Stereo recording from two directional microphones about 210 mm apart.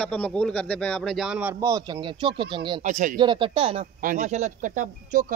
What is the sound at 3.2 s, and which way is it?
Speech, 25° right (ahead or behind).